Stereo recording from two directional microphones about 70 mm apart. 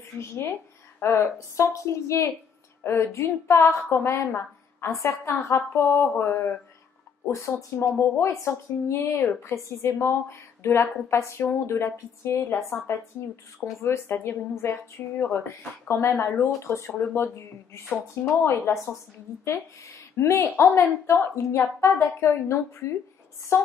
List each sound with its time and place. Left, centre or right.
0.2 s speech: left
1.1 s a woman's voice: left
13.8 s a woman's voice: left
18.4 s a woman's voice: left
20.2 s a woman's voice: left